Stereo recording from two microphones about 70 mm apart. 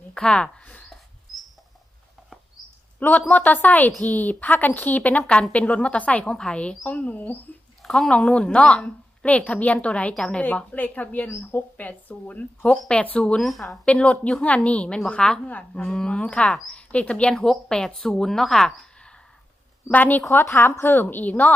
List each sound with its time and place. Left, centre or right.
0.1 s speech: centre
3.0 s speech: left
7.8 s speech: centre
13.8 s speech: centre
15.8 s speech: centre
19.9 s speech: left
20.2 s a woman's voice: left